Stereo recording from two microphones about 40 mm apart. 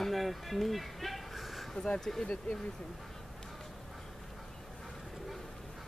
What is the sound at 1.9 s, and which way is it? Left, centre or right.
Speech, centre.